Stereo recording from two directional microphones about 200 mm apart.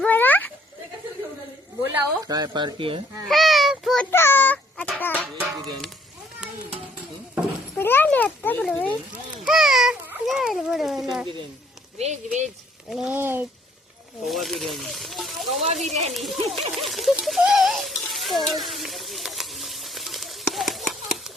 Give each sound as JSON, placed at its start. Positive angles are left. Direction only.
{"t": 0.0, "sound": "a sound", "side_deg": 10}
{"t": 1.8, "sound": "a woman's voice", "side_deg": -15}
{"t": 3.2, "sound": "a sound", "side_deg": 0}
{"t": 4.1, "sound": "speech", "side_deg": 10}
{"t": 7.8, "sound": "a child's voice", "side_deg": 10}
{"t": 11.9, "sound": "speech", "side_deg": -35}
{"t": 12.9, "sound": "speech", "side_deg": -5}
{"t": 14.3, "sound": "speech", "side_deg": 0}
{"t": 15.6, "sound": "speech", "side_deg": -30}
{"t": 16.1, "sound": "speech", "side_deg": 0}
{"t": 16.5, "sound": "a sound", "side_deg": 0}
{"t": 18.6, "sound": "frying", "side_deg": 0}